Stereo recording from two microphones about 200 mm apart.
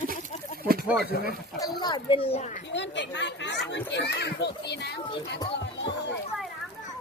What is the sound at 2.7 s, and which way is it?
Speech, 60° left (ahead or behind).